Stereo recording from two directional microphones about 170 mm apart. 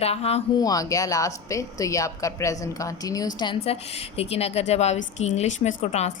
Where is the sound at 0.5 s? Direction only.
20° left (ahead or behind).